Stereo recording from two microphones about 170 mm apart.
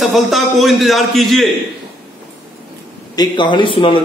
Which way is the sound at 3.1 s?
25° left (ahead or behind).